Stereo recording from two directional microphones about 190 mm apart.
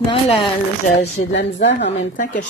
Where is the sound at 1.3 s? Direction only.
65° left (ahead or behind).